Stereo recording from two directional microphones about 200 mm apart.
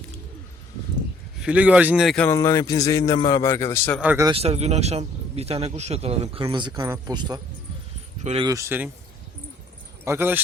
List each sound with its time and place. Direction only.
1.4 s a man's voice: 5° right (ahead or behind); by 4.0 s 10° left (ahead or behind)
4.0 s speech: 10° right (ahead or behind)
4.3 s a man's voice: 30° right (ahead or behind)
8.2 s speech: 30° right (ahead or behind)
8.4 s speech: 15° right (ahead or behind)
10.0 s speech: 10° right (ahead or behind)